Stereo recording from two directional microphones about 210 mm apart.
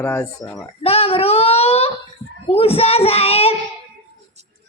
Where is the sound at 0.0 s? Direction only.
15° left (ahead or behind).